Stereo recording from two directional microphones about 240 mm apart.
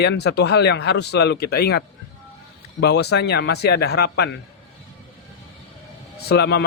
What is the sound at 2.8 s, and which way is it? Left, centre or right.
A man's voice, left.